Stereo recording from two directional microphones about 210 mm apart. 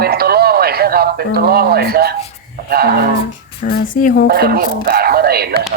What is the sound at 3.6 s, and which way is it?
Speech, 45° left (ahead or behind).